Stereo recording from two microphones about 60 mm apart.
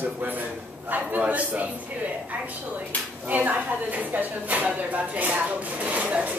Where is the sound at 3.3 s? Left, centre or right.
Right.